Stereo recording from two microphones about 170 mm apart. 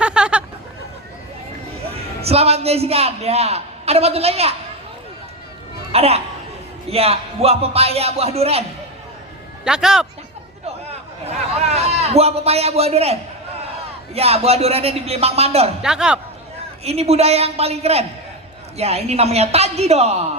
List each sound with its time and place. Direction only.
0.0 s hubbub: 5° right (ahead or behind)
1.9 s a man's voice: 35° right (ahead or behind)
5.9 s speech: 35° right (ahead or behind)
9.6 s a man's voice: 5° right (ahead or behind)
11.3 s a man's voice: 40° right (ahead or behind)
15.8 s a man's voice: 5° right (ahead or behind)
16.8 s speech: 35° right (ahead or behind)